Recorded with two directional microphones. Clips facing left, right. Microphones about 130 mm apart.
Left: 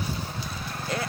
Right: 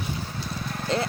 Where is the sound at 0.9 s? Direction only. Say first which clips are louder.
Right 5 dB; 25° right (ahead or behind).